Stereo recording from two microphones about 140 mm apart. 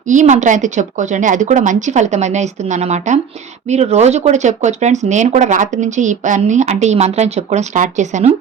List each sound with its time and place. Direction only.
0.0 s speech: 60° right (ahead or behind)